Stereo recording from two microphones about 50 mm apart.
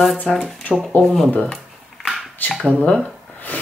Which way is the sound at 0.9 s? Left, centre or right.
Left.